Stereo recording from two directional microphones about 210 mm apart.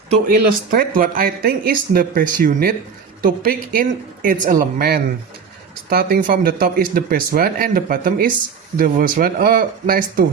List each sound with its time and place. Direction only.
0.3 s speech: 45° right (ahead or behind)